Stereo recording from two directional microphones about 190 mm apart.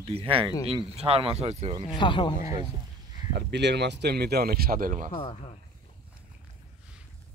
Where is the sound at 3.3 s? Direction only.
65° right (ahead or behind); by 5.1 s 45° right (ahead or behind).